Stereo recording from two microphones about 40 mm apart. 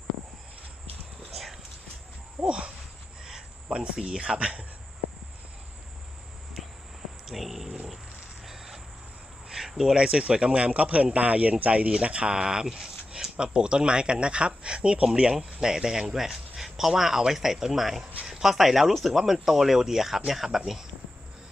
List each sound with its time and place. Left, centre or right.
2.4 s speech: right
6.6 s a sound: centre
7.3 s purr: centre
8.4 s cricket: centre
9.9 s a man's voice: centre
13.3 s a man's voice: right; by 20.8 s centre